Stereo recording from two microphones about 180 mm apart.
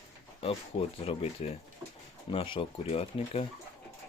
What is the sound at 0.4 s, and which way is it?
Speech, 30° left (ahead or behind).